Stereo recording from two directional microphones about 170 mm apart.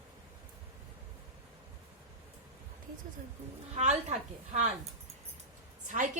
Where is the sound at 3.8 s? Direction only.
40° right (ahead or behind).